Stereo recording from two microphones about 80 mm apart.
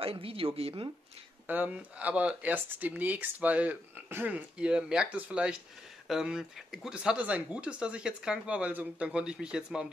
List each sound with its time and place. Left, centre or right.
0.4 s speech: right
1.5 s speech: right